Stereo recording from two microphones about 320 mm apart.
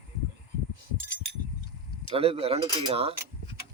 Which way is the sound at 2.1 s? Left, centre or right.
Centre.